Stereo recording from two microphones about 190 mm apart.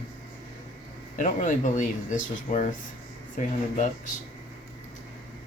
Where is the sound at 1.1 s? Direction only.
45° left (ahead or behind).